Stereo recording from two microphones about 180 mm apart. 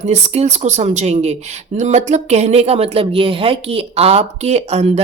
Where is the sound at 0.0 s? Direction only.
35° right (ahead or behind).